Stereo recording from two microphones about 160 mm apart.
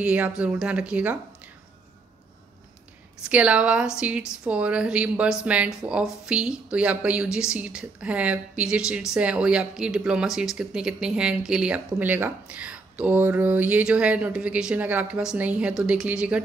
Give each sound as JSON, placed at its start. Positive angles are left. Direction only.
{"t": 0.0, "sound": "speech", "side_deg": -10}
{"t": 3.3, "sound": "speech", "side_deg": -5}